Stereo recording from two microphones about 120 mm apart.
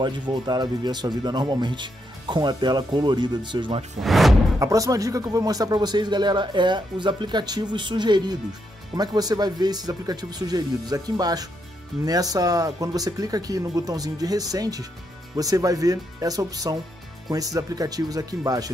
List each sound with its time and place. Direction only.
0.0 s speech: 40° right (ahead or behind)
4.0 s speech: centre (ahead or behind)
4.6 s speech: 30° right (ahead or behind)